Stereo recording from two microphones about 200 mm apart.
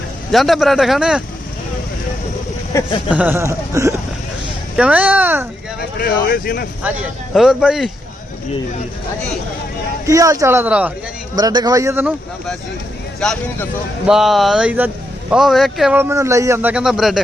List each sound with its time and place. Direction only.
0.3 s a man's voice: centre (ahead or behind)
2.7 s speech: 15° left (ahead or behind)
3.1 s speech: 10° right (ahead or behind)
6.0 s speech: 50° left (ahead or behind)
7.3 s a man's voice: 5° right (ahead or behind)
10.1 s speech: 15° right (ahead or behind)
11.3 s speech: 20° right (ahead or behind)
13.1 s a man's voice: 5° left (ahead or behind)